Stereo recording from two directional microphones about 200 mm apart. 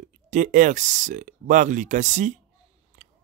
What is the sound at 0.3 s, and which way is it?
Speech, 40° right (ahead or behind).